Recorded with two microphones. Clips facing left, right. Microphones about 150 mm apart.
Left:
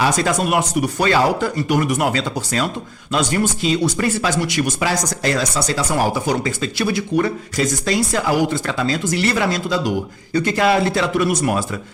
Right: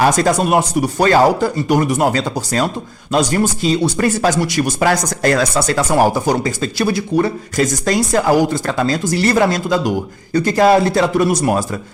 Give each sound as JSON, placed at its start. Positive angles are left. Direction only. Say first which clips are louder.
{"t": 0.0, "sound": "speech", "louder": "right 4 dB", "side_deg": -40}
{"t": 4.9, "sound": "speech", "louder": "right 5 dB", "side_deg": -55}